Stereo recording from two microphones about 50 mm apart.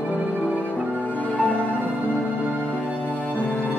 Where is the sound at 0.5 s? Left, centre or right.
Left.